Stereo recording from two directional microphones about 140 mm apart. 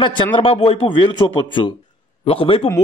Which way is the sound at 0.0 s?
40° left (ahead or behind).